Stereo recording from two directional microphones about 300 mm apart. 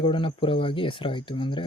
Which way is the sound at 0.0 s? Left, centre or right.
Centre.